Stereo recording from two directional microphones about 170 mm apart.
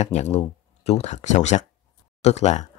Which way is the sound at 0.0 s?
40° left (ahead or behind).